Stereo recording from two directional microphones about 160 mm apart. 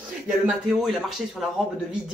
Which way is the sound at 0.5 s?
Centre (ahead or behind).